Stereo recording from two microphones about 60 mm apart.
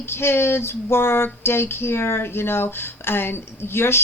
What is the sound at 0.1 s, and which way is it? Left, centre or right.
A woman's voice, left.